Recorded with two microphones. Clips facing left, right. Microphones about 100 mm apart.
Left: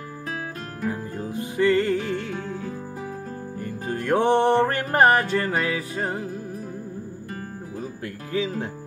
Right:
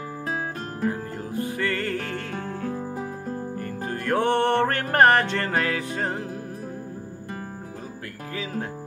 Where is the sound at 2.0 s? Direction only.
55° right (ahead or behind).